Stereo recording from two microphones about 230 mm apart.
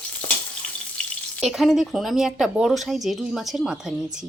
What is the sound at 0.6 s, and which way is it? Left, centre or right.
Frying, centre.